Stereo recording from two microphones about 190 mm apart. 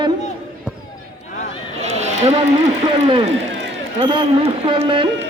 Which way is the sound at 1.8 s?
35° right (ahead or behind).